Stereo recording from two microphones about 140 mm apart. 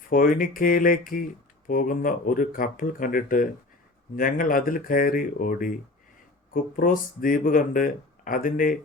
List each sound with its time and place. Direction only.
0.1 s speech: 80° left